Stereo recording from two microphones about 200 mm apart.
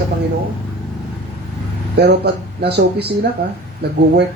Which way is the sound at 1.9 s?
55° right (ahead or behind).